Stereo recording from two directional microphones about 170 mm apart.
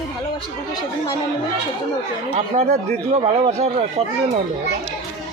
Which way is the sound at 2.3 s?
40° right (ahead or behind).